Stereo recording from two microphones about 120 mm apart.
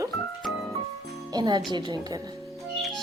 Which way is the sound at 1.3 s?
35° right (ahead or behind).